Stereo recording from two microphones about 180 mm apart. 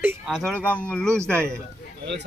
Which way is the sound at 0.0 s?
10° right (ahead or behind).